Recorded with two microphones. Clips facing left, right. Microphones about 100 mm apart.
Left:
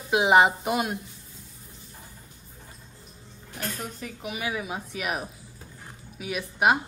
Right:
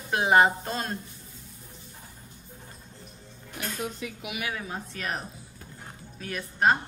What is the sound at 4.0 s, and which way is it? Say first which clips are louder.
Music: left 1 dB; 40° left (ahead or behind).